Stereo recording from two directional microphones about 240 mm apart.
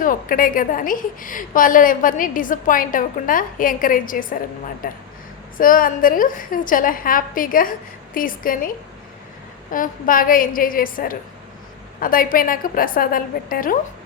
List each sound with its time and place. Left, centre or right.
0.0 s a woman's voice: left
9.7 s a woman's voice: left